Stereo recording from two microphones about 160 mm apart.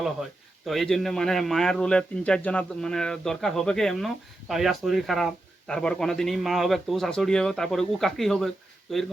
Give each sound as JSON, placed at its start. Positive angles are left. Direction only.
{"t": 0.0, "sound": "speech", "side_deg": 0}